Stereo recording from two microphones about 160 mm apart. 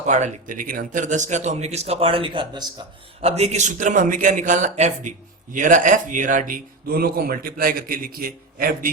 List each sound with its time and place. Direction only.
0.0 s speech: 50° right (ahead or behind)